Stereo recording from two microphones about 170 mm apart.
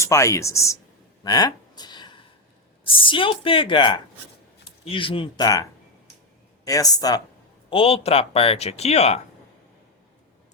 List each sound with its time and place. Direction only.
0.0 s speech: 15° left (ahead or behind)
1.2 s a sound: 20° left (ahead or behind)
2.8 s speech: 30° left (ahead or behind)
6.7 s speech: 20° left (ahead or behind)
7.7 s speech: 35° left (ahead or behind)